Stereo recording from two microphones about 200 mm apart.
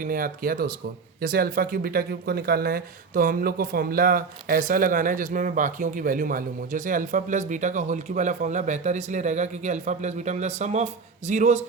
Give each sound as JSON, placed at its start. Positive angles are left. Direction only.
{"t": 0.0, "sound": "speech", "side_deg": -45}